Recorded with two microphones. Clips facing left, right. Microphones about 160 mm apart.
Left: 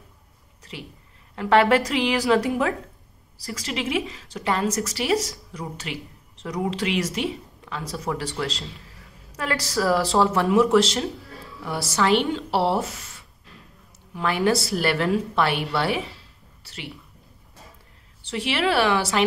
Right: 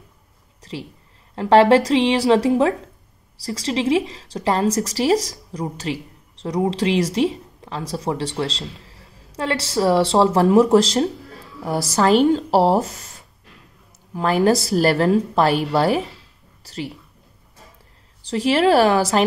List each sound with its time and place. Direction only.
1.3 s a woman's voice: 30° right (ahead or behind)
18.2 s a woman's voice: 35° right (ahead or behind)